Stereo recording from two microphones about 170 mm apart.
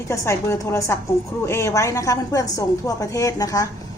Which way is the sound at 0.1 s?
15° left (ahead or behind).